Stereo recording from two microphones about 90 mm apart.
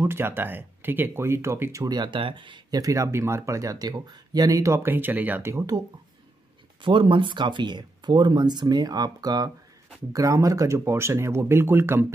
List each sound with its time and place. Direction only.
0.0 s speech: 25° right (ahead or behind)
1.9 s speech: 60° right (ahead or behind)
2.7 s speech: 40° right (ahead or behind)
4.8 s speech: 20° right (ahead or behind)
6.8 s speech: 65° right (ahead or behind); by 9.5 s 50° right (ahead or behind)
10.1 s speech: 40° right (ahead or behind)